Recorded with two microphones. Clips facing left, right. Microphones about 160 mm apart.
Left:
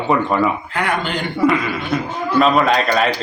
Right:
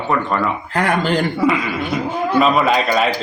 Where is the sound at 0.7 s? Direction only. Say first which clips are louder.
Right 4 dB; 40° right (ahead or behind).